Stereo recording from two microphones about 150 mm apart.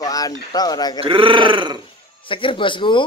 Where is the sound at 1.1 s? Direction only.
35° right (ahead or behind).